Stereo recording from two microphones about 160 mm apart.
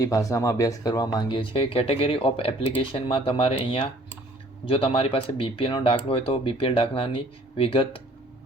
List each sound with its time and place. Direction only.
0.0 s speech: 20° left (ahead or behind)